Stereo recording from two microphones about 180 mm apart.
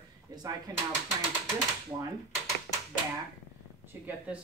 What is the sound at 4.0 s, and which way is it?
Speech, 10° right (ahead or behind).